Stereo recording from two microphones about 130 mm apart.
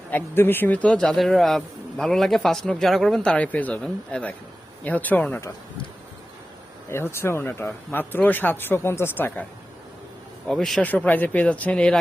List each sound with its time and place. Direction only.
0.1 s a man's voice: 15° left (ahead or behind)
6.9 s a man's voice: 20° left (ahead or behind)